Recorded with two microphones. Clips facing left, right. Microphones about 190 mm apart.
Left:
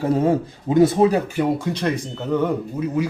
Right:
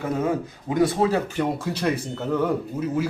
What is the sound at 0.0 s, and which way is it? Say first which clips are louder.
Speech: left 6 dB; 30° left (ahead or behind).